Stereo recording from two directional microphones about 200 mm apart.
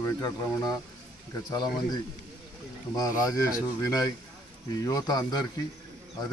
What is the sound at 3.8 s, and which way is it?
Speech, 15° left (ahead or behind).